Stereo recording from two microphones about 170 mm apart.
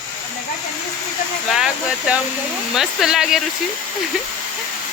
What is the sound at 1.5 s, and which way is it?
Speech, 5° right (ahead or behind).